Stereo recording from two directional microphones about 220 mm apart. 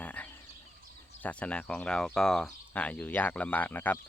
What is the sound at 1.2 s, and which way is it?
Speech, 5° left (ahead or behind).